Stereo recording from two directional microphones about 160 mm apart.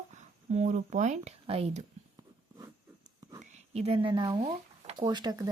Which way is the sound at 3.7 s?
40° right (ahead or behind).